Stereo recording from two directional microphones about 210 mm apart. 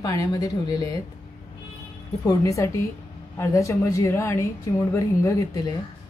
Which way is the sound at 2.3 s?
15° left (ahead or behind).